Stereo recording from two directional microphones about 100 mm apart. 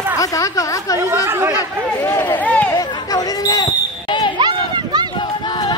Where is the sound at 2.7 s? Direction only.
40° left (ahead or behind).